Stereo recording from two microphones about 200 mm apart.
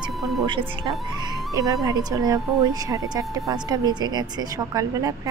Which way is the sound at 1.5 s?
15° right (ahead or behind).